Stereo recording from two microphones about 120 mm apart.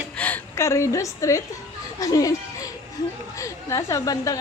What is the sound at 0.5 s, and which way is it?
Speech, 25° left (ahead or behind).